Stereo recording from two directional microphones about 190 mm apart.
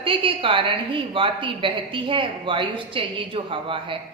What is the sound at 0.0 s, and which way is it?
A woman's voice, 30° right (ahead or behind).